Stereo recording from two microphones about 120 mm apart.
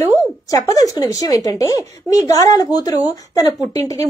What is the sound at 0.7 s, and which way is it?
A woman's voice, 30° left (ahead or behind).